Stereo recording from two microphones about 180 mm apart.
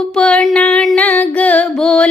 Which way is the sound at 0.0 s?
5° left (ahead or behind).